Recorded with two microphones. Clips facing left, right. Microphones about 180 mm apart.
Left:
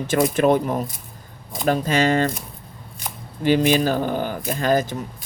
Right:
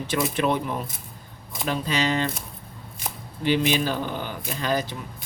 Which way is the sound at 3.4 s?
45° left (ahead or behind).